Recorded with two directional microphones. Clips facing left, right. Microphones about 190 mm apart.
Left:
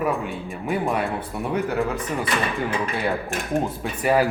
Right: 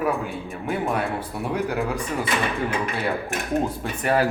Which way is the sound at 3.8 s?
10° left (ahead or behind).